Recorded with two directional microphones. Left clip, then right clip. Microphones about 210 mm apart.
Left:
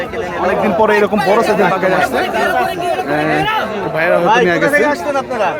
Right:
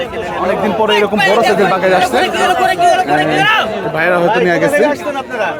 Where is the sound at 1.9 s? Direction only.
15° right (ahead or behind).